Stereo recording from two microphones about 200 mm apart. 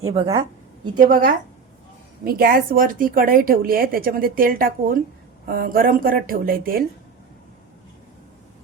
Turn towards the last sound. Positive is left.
turn(degrees=-45)  # may be behind; listen again after turning